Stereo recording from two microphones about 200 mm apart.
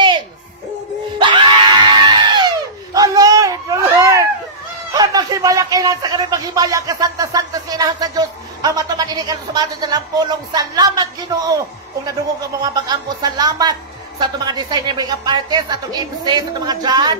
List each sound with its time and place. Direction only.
1.2 s screaming: 25° right (ahead or behind)
2.9 s a sound: 15° right (ahead or behind)
12.6 s a woman's voice: 20° right (ahead or behind)